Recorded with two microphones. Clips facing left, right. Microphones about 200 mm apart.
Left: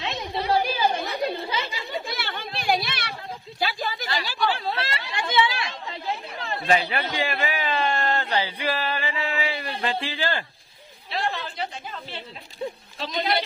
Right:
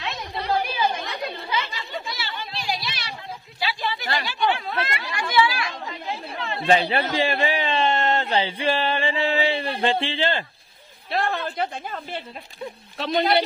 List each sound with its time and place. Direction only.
0.0 s chatter: 25° left (ahead or behind)
0.4 s chatter: 10° left (ahead or behind)
2.0 s a sound: 55° left (ahead or behind)
4.3 s chatter: 35° left (ahead or behind)
6.6 s a man's voice: 30° right (ahead or behind)
11.1 s a woman's voice: 55° right (ahead or behind)